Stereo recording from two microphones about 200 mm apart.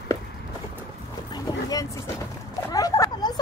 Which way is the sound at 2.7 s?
20° left (ahead or behind).